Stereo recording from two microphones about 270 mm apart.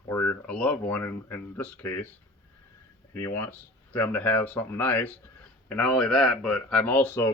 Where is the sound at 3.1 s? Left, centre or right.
Centre.